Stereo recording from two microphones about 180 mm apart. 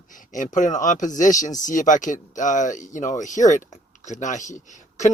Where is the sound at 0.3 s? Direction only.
45° left (ahead or behind).